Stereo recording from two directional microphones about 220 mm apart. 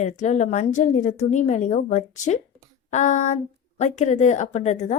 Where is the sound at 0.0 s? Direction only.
30° left (ahead or behind).